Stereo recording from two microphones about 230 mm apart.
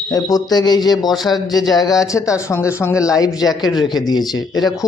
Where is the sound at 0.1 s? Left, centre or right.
Centre.